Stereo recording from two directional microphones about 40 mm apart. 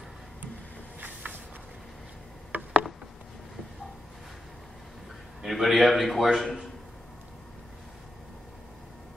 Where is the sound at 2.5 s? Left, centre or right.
Right.